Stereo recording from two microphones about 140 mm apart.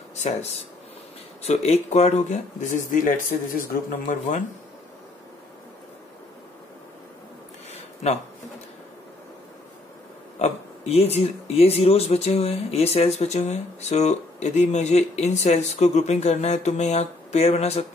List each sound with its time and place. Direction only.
0.1 s speech: 50° left (ahead or behind); by 3.6 s 70° left (ahead or behind)
8.0 s speech: 50° left (ahead or behind)
10.4 s speech: 50° left (ahead or behind)